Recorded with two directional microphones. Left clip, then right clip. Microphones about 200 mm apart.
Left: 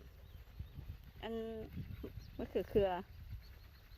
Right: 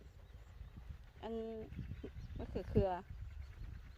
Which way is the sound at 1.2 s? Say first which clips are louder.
Left 1 dB; 30° left (ahead or behind).